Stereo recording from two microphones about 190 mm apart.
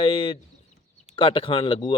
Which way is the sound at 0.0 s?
25° left (ahead or behind).